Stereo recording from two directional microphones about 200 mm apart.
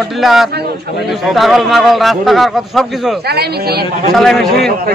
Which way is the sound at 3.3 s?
55° right (ahead or behind).